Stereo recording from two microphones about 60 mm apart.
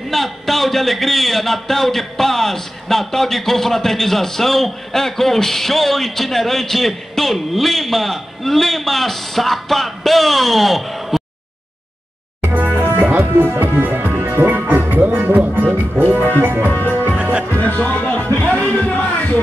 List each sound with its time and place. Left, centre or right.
0.1 s a man's voice: centre
12.5 s music: right
16.7 s music: left
17.2 s music: centre
17.5 s music: left
18.5 s a sound: left